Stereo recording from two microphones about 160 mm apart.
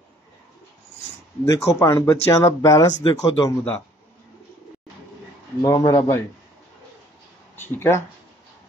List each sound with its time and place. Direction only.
1.4 s speech: 20° left (ahead or behind)
5.6 s speech: 20° left (ahead or behind)
7.5 s speech: 15° left (ahead or behind)